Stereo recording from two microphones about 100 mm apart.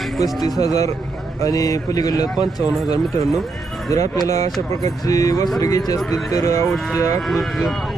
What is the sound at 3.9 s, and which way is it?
Speech, 35° left (ahead or behind).